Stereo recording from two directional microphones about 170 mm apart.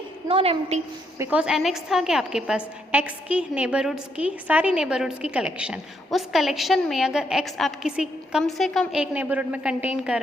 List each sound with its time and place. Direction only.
0.3 s a woman's voice: 35° right (ahead or behind)
1.2 s a woman's voice: 5° right (ahead or behind)